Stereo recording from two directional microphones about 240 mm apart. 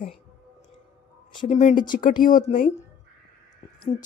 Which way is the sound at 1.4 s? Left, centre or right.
Left.